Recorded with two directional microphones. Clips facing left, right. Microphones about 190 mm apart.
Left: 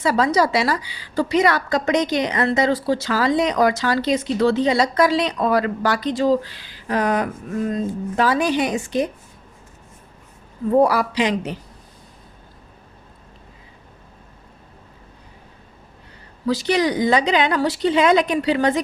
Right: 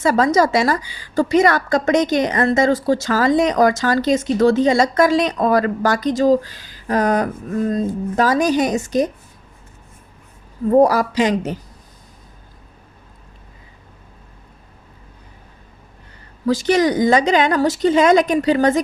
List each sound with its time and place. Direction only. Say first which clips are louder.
0.0 s a woman's voice: right 3 dB; 45° right (ahead or behind)
10.7 s a woman's voice: right 3 dB; 40° right (ahead or behind)
16.5 s a woman's voice: right 3 dB; 45° right (ahead or behind)